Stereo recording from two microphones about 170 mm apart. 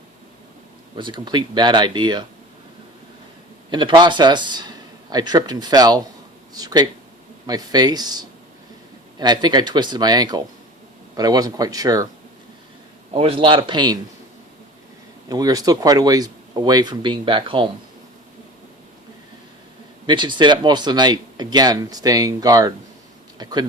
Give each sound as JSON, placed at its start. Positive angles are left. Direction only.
{"t": 0.9, "sound": "speech", "side_deg": -30}
{"t": 3.7, "sound": "speech", "side_deg": -25}
{"t": 13.1, "sound": "a man's voice", "side_deg": -35}
{"t": 15.3, "sound": "speech", "side_deg": -20}
{"t": 20.1, "sound": "speech", "side_deg": -25}